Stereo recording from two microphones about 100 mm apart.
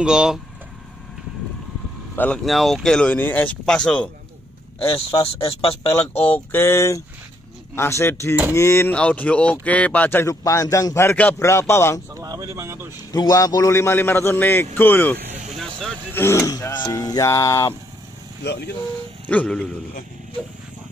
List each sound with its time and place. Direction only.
0.0 s speech: 10° right (ahead or behind)
2.1 s speech: 15° left (ahead or behind)
2.4 s speech: centre (ahead or behind); by 3.5 s 20° left (ahead or behind)
3.6 s speech: 10° left (ahead or behind)
4.9 s speech: 75° left (ahead or behind)
6.1 s a man's voice: 20° left (ahead or behind)
8.9 s speech: 15° left (ahead or behind)
10.4 s a man's voice: 35° left (ahead or behind)
12.2 s speech: 30° right (ahead or behind)
13.1 s a man's voice: 40° left (ahead or behind)
16.7 s speech: 45° left (ahead or behind)
19.2 s speech: 10° left (ahead or behind)